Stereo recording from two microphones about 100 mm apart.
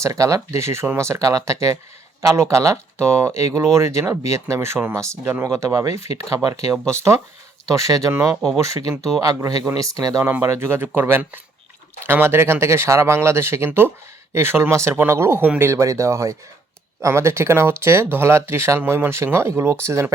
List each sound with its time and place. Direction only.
0.0 s speech: 30° right (ahead or behind)
10.2 s speech: 20° right (ahead or behind)